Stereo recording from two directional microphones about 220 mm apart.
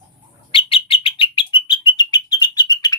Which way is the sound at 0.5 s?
25° left (ahead or behind).